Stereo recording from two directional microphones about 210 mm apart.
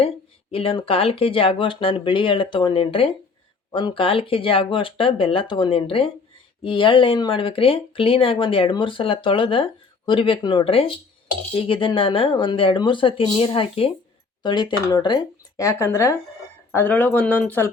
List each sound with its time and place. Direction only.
0.5 s speech: 25° left (ahead or behind); by 17.7 s 10° left (ahead or behind)